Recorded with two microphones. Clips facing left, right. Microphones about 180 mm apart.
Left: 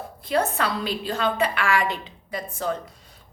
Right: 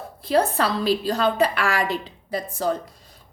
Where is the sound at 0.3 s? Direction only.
35° right (ahead or behind).